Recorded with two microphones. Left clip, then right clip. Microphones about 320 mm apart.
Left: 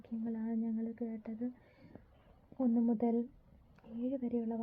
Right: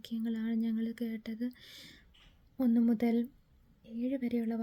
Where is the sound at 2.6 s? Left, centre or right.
Right.